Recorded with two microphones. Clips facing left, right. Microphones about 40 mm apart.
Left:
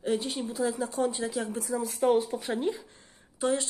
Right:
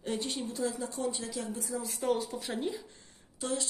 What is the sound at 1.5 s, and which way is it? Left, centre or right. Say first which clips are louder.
Speech: left 5 dB; left.